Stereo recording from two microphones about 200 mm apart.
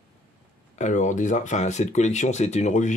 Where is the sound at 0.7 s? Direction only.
35° left (ahead or behind).